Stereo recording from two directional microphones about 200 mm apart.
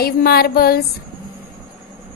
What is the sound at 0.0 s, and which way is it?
Speech, 50° left (ahead or behind).